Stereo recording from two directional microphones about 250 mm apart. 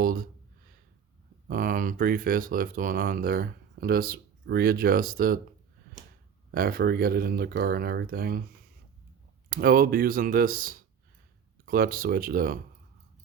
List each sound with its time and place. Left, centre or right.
0.0 s speech: right
1.5 s speech: right
6.5 s speech: right
9.5 s speech: right